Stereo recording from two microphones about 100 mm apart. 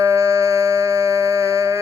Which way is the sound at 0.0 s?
30° right (ahead or behind).